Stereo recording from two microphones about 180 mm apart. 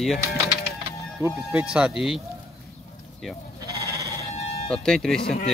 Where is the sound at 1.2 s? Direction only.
10° right (ahead or behind).